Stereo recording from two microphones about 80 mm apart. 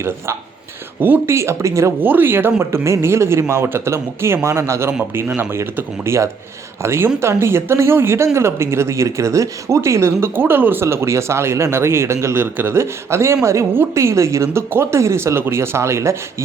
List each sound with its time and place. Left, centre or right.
0.9 s speech: right
1.4 s speech: right
2.0 s speech: right